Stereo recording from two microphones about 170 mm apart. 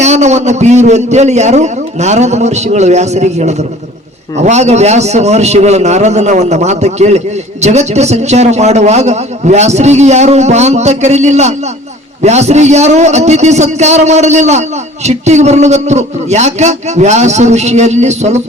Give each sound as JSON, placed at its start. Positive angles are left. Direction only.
{"t": 0.0, "sound": "a man's voice", "side_deg": -40}